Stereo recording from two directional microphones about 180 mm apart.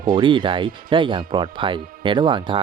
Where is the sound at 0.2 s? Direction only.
25° right (ahead or behind).